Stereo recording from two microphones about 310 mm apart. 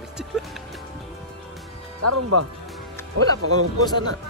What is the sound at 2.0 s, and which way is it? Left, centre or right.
Speech, right.